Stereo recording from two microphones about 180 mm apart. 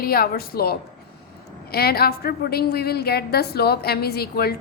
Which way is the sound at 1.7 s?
60° left (ahead or behind).